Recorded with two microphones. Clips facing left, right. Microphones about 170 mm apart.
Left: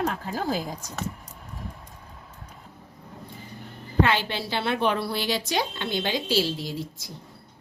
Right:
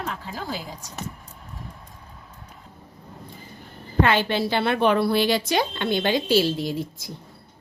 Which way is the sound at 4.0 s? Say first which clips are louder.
Right 3 dB; 50° right (ahead or behind).